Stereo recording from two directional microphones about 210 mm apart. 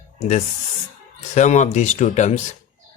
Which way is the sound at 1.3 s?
35° left (ahead or behind).